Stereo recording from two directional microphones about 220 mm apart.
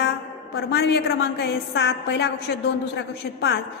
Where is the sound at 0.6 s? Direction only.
50° left (ahead or behind).